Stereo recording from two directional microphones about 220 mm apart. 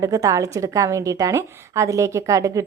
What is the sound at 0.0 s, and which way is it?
A woman's voice, 15° right (ahead or behind).